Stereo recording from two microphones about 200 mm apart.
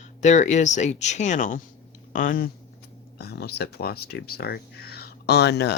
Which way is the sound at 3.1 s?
55° left (ahead or behind).